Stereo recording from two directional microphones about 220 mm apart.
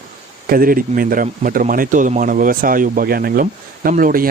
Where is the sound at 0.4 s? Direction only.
40° right (ahead or behind).